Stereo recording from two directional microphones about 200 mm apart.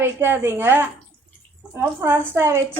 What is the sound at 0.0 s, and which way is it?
A woman's voice, 10° right (ahead or behind).